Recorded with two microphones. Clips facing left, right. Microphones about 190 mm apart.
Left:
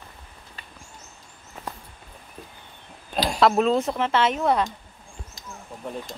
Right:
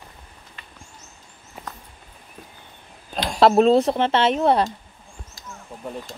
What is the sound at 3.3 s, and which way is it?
Speech, 30° right (ahead or behind).